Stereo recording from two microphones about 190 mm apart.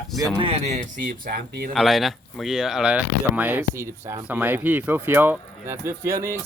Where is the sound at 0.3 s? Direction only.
30° right (ahead or behind); by 1.7 s 50° right (ahead or behind).